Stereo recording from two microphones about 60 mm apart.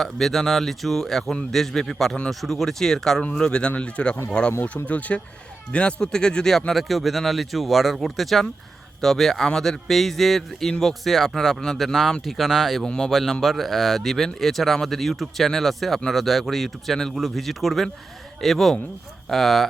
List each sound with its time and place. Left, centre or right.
0.0 s a man's voice: centre